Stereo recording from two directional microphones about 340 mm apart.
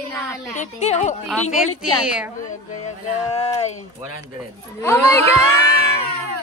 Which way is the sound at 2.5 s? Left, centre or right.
Left.